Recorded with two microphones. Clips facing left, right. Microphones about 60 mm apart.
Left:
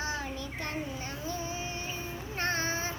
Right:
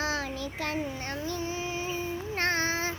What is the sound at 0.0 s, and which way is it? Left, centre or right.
Child singing, right.